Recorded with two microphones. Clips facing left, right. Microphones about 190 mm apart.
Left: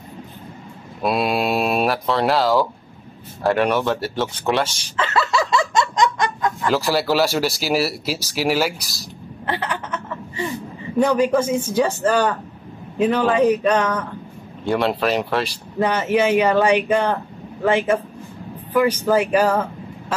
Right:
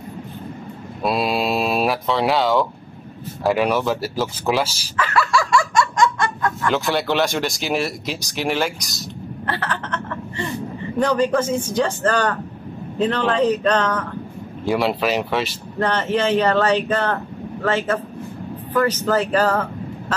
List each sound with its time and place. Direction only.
1.0 s speech: centre (ahead or behind)
4.9 s snicker: 25° left (ahead or behind)
6.7 s speech: centre (ahead or behind)
9.5 s a sound: 15° left (ahead or behind)
11.0 s speech: 10° left (ahead or behind)
14.7 s speech: centre (ahead or behind)
15.8 s speech: 10° left (ahead or behind)